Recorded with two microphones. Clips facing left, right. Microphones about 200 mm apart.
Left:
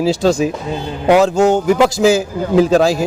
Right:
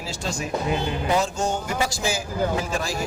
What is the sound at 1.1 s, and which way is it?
Speech, 70° left (ahead or behind).